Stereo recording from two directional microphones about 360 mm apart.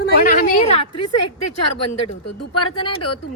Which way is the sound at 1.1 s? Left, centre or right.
Left.